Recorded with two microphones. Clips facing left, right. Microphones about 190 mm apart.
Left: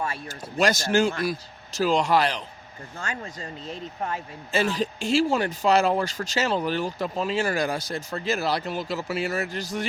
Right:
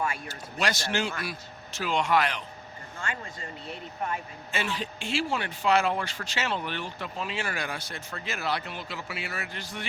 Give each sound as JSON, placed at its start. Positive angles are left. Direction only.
{"t": 0.3, "sound": "speech", "side_deg": 45}
{"t": 4.1, "sound": "speech", "side_deg": 40}